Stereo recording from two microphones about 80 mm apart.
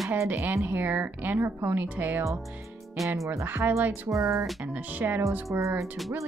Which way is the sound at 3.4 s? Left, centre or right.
Right.